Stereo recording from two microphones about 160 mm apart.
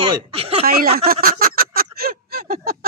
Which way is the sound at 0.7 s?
70° right (ahead or behind).